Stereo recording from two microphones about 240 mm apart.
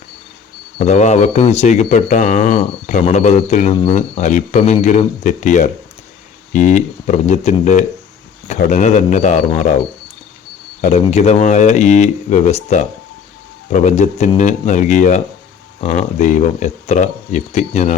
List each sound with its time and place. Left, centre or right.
0.8 s speech: left
10.8 s speech: left